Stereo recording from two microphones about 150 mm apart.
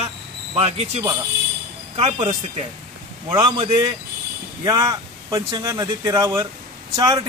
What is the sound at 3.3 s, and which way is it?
Speech, 30° right (ahead or behind).